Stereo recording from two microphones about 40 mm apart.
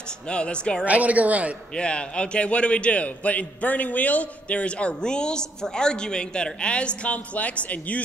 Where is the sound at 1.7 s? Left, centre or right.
Left.